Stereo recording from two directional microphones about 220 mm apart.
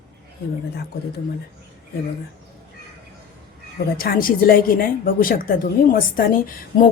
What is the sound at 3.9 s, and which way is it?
A woman's voice, 40° left (ahead or behind).